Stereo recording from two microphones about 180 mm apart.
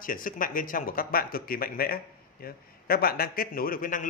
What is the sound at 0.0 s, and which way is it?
A man's voice, 50° left (ahead or behind).